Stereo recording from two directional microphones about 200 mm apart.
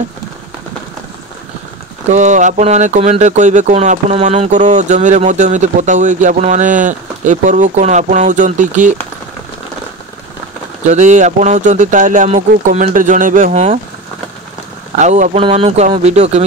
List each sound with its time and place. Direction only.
2.0 s speech: 35° right (ahead or behind)
10.9 s speech: 35° right (ahead or behind)
15.0 s speech: 35° right (ahead or behind)